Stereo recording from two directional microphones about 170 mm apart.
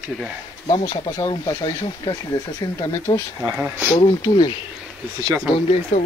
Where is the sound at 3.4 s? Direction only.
10° right (ahead or behind).